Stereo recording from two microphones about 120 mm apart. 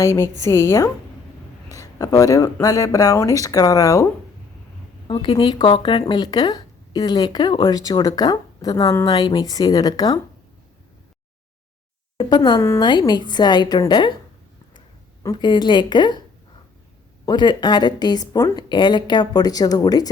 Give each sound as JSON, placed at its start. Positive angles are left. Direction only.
{"t": 0.0, "sound": "speech", "side_deg": 25}
{"t": 5.0, "sound": "speech", "side_deg": 45}
{"t": 12.1, "sound": "speech", "side_deg": 40}
{"t": 15.2, "sound": "speech", "side_deg": 35}
{"t": 17.2, "sound": "speech", "side_deg": 40}